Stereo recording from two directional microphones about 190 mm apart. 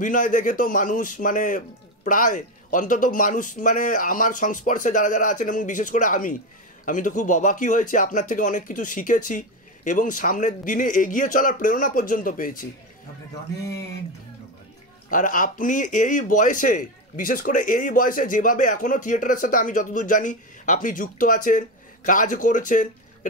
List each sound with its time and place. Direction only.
0.0 s speech: 45° left (ahead or behind)
15.0 s speech: 45° left (ahead or behind)